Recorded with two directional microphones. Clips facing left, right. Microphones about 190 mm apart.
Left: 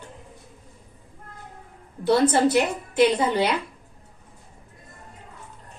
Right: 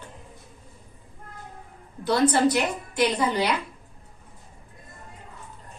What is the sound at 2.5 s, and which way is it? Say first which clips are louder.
Speech: left 4 dB; 25° left (ahead or behind).